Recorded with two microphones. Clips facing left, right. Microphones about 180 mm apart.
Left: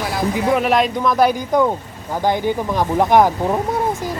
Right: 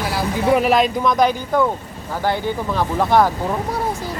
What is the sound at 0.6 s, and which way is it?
Speech, centre (ahead or behind).